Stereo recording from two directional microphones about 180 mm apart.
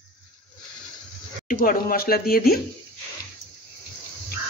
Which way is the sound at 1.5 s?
50° left (ahead or behind).